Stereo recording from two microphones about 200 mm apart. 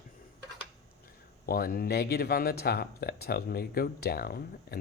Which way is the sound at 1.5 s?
45° left (ahead or behind).